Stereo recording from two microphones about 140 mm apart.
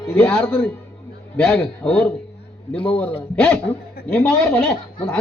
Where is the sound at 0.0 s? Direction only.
10° left (ahead or behind).